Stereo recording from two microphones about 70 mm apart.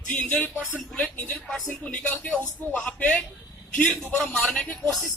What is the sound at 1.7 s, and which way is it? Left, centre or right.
Speech, centre.